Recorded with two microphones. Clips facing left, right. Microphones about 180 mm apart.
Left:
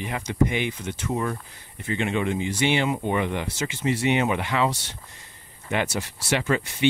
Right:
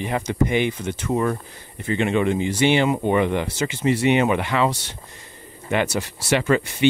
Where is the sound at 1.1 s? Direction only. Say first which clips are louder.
Right 5 dB; 70° right (ahead or behind).